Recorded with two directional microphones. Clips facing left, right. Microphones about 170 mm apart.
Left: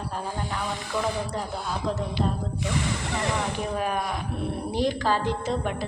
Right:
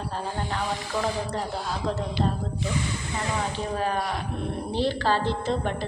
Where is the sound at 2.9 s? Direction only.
75° left (ahead or behind).